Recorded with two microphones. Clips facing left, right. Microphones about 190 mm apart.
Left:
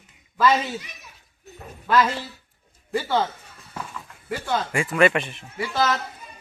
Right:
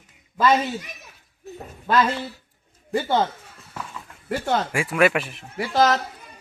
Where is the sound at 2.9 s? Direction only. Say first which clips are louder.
Right 2 dB; 20° right (ahead or behind).